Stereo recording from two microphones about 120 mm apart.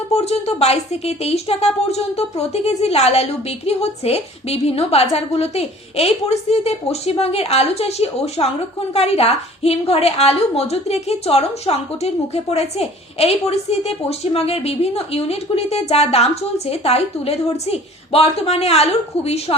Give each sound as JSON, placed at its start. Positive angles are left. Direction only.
{"t": 0.1, "sound": "a woman's voice", "side_deg": 60}